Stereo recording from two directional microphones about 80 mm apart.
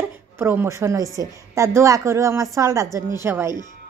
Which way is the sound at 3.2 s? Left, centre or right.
Right.